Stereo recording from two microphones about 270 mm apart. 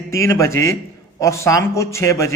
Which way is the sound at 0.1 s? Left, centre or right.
Centre.